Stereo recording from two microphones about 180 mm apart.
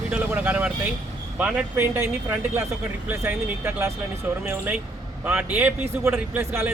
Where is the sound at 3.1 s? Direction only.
10° right (ahead or behind).